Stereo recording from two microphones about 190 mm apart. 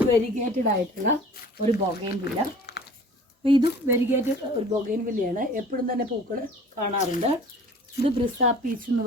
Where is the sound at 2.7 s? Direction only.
60° left (ahead or behind).